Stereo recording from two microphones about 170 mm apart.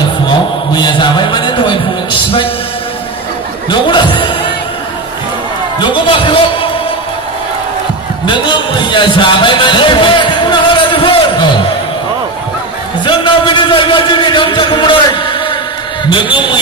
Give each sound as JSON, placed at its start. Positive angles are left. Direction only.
{"t": 0.3, "sound": "music", "side_deg": 25}
{"t": 3.7, "sound": "speech", "side_deg": 30}
{"t": 5.8, "sound": "a man's voice", "side_deg": 30}
{"t": 8.3, "sound": "a sound", "side_deg": 30}
{"t": 13.0, "sound": "a sound", "side_deg": 30}
{"t": 16.1, "sound": "speech", "side_deg": 30}